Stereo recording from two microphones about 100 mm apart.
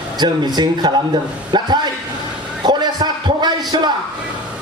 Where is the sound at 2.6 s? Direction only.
45° right (ahead or behind).